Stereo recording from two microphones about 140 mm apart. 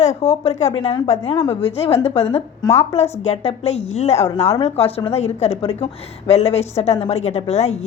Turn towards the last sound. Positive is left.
turn(degrees=50)  # may be behind; listen again after turning